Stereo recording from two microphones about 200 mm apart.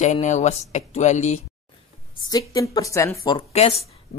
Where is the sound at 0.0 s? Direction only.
35° left (ahead or behind).